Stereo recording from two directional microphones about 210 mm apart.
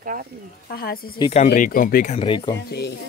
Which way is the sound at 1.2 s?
30° left (ahead or behind).